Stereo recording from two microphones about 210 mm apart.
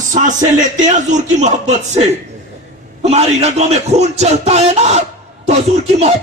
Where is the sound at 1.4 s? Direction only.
35° right (ahead or behind).